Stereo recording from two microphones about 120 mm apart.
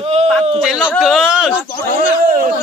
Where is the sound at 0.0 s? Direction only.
60° right (ahead or behind).